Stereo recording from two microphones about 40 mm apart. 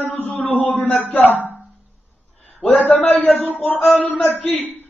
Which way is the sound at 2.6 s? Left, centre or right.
Left.